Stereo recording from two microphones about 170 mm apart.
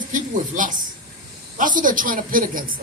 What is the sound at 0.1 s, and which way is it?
A man's voice, 50° right (ahead or behind).